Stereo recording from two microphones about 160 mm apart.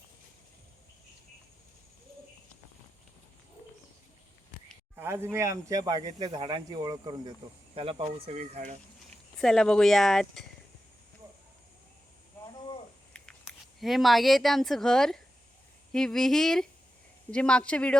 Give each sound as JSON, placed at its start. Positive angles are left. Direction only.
{"t": 4.9, "sound": "speech", "side_deg": -15}
{"t": 8.4, "sound": "speech", "side_deg": -45}
{"t": 9.4, "sound": "speech", "side_deg": 5}
{"t": 13.1, "sound": "speech", "side_deg": 5}